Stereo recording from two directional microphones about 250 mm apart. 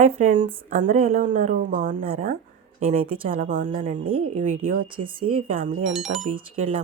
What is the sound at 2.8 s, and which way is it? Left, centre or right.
Speech, right.